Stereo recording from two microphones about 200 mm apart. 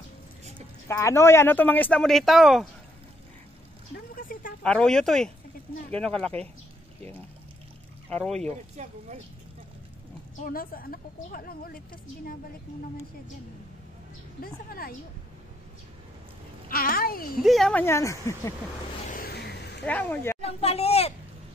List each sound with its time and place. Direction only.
0.8 s speech: 15° left (ahead or behind)
3.9 s a sound: 45° left (ahead or behind)
4.6 s speech: 5° left (ahead or behind)
8.5 s speech: 35° right (ahead or behind)
10.3 s a woman's voice: 45° left (ahead or behind)
14.4 s a woman's voice: 45° left (ahead or behind)
16.6 s a child's voice: 45° left (ahead or behind)
17.4 s speech: centre (ahead or behind)
19.0 s vehicle: 50° left (ahead or behind)
19.9 s speech: 10° left (ahead or behind)
20.4 s speech: 30° left (ahead or behind)